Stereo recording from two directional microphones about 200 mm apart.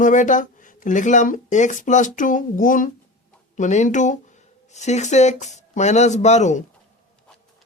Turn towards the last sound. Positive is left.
turn(degrees=35)  # may be behind; listen again after turning